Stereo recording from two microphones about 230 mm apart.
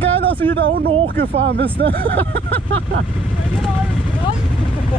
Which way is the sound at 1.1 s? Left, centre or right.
Right.